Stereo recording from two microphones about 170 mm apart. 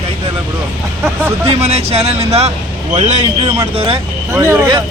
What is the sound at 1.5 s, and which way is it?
Speech, 40° right (ahead or behind).